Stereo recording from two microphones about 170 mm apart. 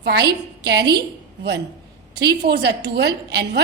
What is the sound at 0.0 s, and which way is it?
A woman's voice, 75° right (ahead or behind).